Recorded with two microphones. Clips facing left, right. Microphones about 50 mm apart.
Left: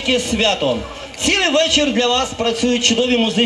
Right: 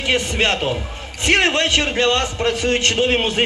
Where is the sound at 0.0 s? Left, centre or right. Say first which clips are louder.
Left 2 dB; right.